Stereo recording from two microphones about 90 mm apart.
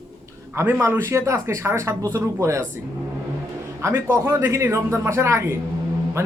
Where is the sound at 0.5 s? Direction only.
25° right (ahead or behind).